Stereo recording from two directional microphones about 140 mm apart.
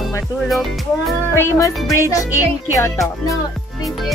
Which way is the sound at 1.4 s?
25° left (ahead or behind).